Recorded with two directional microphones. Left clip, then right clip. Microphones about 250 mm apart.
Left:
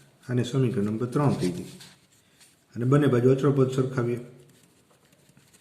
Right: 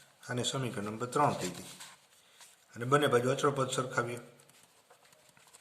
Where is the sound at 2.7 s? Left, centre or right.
Right.